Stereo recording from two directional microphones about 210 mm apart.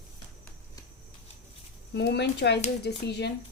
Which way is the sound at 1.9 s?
55° left (ahead or behind).